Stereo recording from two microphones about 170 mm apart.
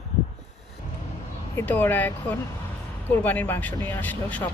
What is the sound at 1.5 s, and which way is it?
Speech, 10° left (ahead or behind).